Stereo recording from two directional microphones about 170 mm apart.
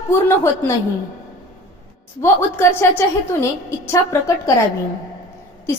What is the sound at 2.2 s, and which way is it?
A woman's voice, 15° left (ahead or behind).